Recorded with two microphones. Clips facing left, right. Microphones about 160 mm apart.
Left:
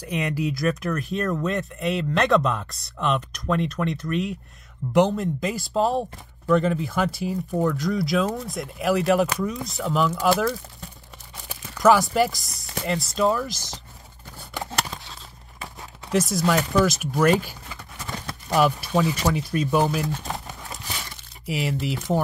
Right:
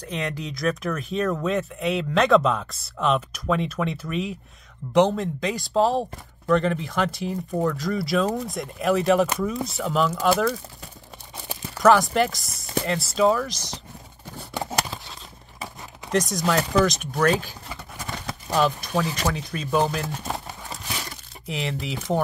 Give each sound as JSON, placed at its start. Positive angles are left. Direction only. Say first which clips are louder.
{"t": 0.0, "sound": "speech", "louder": "left 4 dB", "side_deg": 10}
{"t": 11.8, "sound": "speech", "louder": "even", "side_deg": 5}
{"t": 16.1, "sound": "speech", "louder": "left 1 dB", "side_deg": 5}
{"t": 21.5, "sound": "speech", "louder": "left 3 dB", "side_deg": 5}